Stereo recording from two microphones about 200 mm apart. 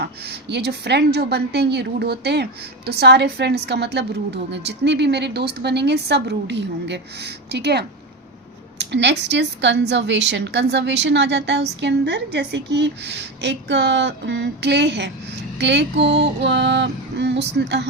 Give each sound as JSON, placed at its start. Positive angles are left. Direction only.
{"t": 0.0, "sound": "a woman's voice", "side_deg": -55}